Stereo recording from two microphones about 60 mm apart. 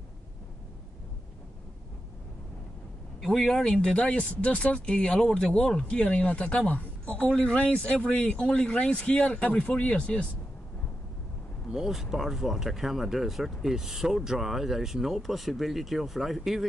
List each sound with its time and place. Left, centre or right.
3.2 s speech: centre
11.7 s speech: centre